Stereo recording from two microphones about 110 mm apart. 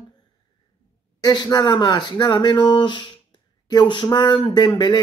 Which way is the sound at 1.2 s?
40° left (ahead or behind).